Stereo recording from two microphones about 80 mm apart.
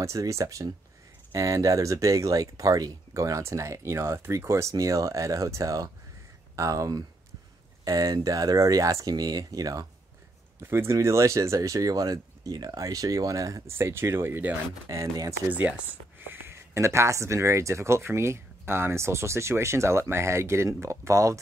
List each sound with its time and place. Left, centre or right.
0.0 s speech: right
10.6 s speech: right
14.9 s speech: right
15.4 s speech: right